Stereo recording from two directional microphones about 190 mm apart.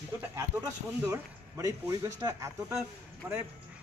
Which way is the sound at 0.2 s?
10° right (ahead or behind).